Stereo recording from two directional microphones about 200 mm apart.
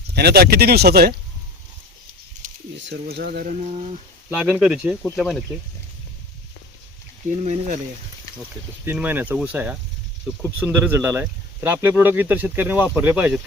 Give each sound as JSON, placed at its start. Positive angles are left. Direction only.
{"t": 0.1, "sound": "speech", "side_deg": -55}
{"t": 2.4, "sound": "snake", "side_deg": -40}
{"t": 2.8, "sound": "speech", "side_deg": -55}
{"t": 4.4, "sound": "speech", "side_deg": -5}
{"t": 7.4, "sound": "speech", "side_deg": -35}
{"t": 8.4, "sound": "speech", "side_deg": -10}